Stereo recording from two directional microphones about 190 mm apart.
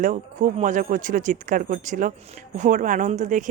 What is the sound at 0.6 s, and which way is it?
Speech, 45° right (ahead or behind).